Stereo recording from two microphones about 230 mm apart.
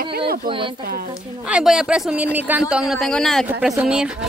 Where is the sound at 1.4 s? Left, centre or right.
Centre.